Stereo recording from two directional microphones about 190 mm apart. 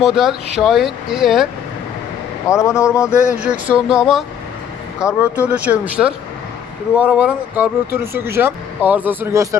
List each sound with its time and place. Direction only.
0.0 s speech: centre (ahead or behind)
2.5 s speech: 15° left (ahead or behind)
3.1 s speech: 5° right (ahead or behind)
4.9 s speech: 15° left (ahead or behind)
5.5 s speech: 5° right (ahead or behind)